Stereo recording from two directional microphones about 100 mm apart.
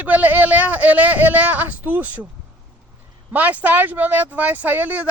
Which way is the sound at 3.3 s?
15° right (ahead or behind).